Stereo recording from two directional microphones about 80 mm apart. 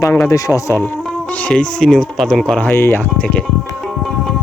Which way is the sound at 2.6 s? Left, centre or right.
Left.